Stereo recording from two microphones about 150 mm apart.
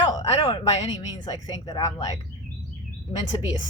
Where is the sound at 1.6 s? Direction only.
25° left (ahead or behind).